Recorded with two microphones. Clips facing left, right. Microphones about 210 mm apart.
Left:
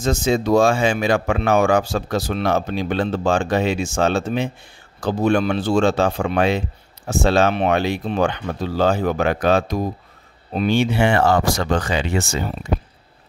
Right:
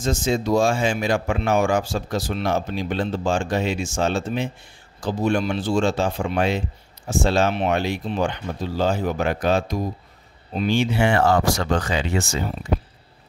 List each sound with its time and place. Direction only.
0.0 s speech: 60° left (ahead or behind)